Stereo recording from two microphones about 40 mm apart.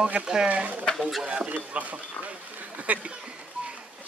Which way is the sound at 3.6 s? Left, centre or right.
Right.